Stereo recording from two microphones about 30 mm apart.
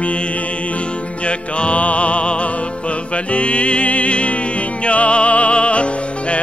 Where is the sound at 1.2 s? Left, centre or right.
Left.